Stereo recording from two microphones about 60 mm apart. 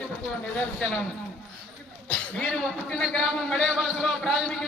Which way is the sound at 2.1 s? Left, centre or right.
Centre.